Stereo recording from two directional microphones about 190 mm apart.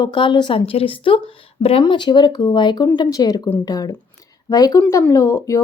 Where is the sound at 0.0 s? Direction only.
25° left (ahead or behind).